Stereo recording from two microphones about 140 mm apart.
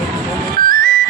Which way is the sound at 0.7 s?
85° right.